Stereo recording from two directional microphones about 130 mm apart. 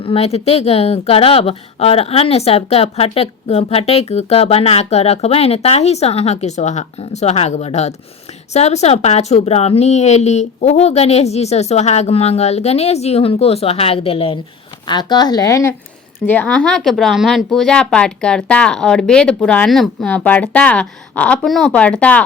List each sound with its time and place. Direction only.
0.0 s a woman's voice: 50° left (ahead or behind)
14.8 s a woman's voice: 35° left (ahead or behind)
16.2 s a woman's voice: 10° left (ahead or behind)